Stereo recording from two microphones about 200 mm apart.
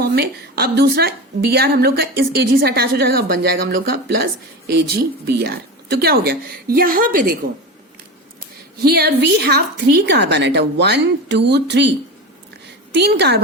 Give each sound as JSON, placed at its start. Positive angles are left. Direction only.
{"t": 0.0, "sound": "a woman's voice", "side_deg": -50}
{"t": 8.4, "sound": "a woman's voice", "side_deg": -50}
{"t": 12.6, "sound": "a sound", "side_deg": -55}